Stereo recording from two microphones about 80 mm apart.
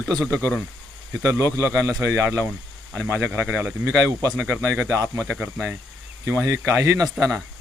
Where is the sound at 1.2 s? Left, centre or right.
Right.